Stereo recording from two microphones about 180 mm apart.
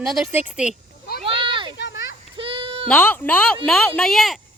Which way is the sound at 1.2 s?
30° right (ahead or behind).